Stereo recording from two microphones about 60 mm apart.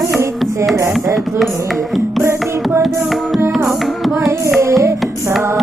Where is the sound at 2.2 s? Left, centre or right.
Right.